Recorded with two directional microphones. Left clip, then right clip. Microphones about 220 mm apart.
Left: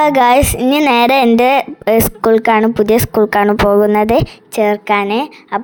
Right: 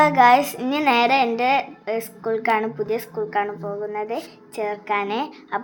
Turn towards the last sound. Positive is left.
turn(degrees=30)  # may be behind; listen again after turning